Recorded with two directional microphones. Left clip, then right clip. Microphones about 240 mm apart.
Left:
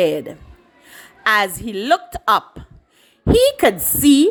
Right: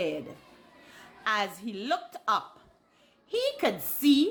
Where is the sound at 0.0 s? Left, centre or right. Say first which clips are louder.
Left 14 dB; left.